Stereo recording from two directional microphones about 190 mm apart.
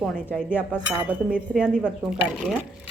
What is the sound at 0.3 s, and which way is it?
Speech, 10° left (ahead or behind).